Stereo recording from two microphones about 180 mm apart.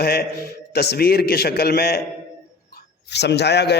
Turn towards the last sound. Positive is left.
turn(degrees=70)  # may be behind; listen again after turning